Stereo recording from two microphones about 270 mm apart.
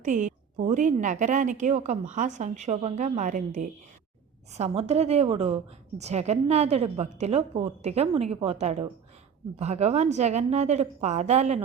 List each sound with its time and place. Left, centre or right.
0.0 s a woman's voice: right
4.5 s a woman's voice: right